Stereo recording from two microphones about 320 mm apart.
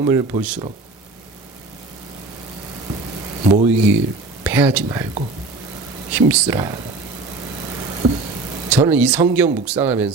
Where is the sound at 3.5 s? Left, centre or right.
Centre.